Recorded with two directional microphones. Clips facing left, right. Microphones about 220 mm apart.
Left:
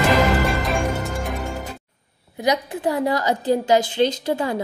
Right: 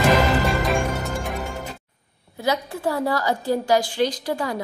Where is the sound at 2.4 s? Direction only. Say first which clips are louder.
Left 2 dB; 20° left (ahead or behind).